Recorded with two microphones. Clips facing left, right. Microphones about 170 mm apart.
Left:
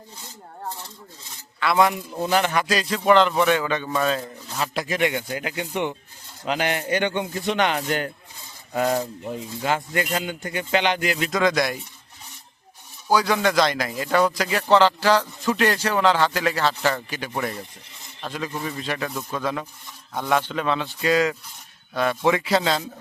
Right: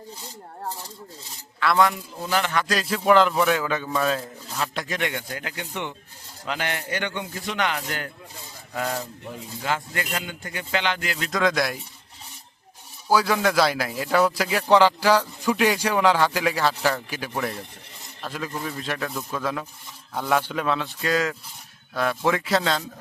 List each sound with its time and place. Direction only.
1.7 s a man's voice: 15° left (ahead or behind)
2.6 s a man's voice: centre (ahead or behind); by 11.3 s 20° left (ahead or behind)
11.3 s speech: centre (ahead or behind)
13.1 s speech: 5° right (ahead or behind)